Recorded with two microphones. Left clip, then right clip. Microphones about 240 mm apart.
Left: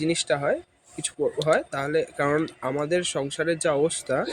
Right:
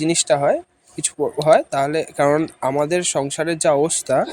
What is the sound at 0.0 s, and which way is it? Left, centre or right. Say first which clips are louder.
Speech: right 7 dB; right.